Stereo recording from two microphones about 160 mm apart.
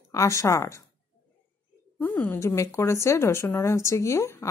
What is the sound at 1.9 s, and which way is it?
A woman's voice, 10° left (ahead or behind).